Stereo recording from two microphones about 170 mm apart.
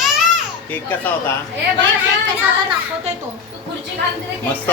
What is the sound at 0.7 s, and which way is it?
Speech, 10° left (ahead or behind).